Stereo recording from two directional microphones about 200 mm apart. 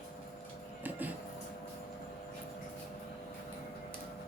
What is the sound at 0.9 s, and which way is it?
Music, 10° right (ahead or behind).